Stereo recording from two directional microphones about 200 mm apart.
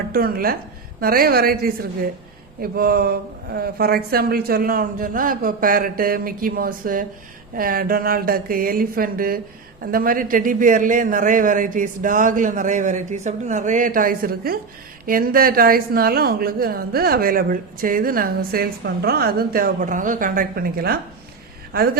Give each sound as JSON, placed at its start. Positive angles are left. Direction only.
{"t": 0.1, "sound": "a woman's voice", "side_deg": -50}